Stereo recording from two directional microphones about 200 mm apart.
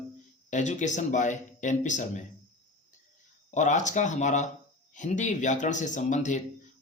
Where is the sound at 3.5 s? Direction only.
40° left (ahead or behind).